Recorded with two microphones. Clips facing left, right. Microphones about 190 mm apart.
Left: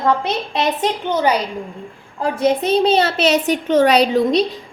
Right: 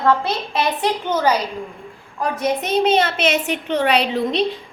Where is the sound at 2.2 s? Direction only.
30° left (ahead or behind).